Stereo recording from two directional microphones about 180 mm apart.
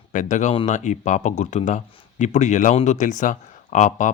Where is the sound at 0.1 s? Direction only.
45° left (ahead or behind).